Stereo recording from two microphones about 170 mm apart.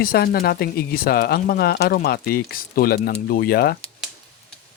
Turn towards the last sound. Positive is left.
turn(degrees=65)  # may be behind; listen again after turning